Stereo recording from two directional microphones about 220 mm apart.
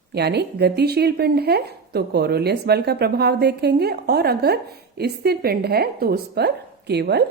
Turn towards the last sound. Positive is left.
turn(degrees=-50)  # may be behind; listen again after turning